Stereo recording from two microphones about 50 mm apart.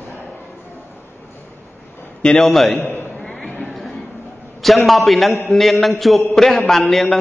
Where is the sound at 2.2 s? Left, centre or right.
Centre.